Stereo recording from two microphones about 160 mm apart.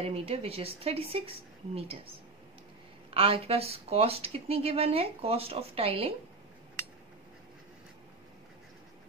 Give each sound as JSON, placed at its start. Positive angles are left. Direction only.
{"t": 0.0, "sound": "speech", "side_deg": -35}